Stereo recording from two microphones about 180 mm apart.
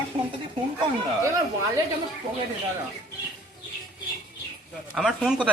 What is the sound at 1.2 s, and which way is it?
Speech, 15° right (ahead or behind).